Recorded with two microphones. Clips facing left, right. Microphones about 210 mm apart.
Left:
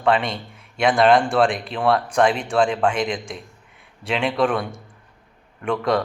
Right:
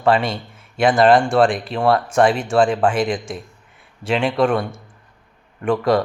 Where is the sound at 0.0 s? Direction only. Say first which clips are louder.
Right 3 dB; centre (ahead or behind).